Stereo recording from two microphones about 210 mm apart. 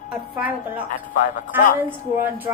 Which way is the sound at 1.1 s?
35° left (ahead or behind).